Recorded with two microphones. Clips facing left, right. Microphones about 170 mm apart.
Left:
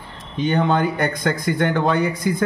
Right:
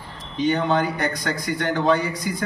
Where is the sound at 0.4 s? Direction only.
50° left (ahead or behind).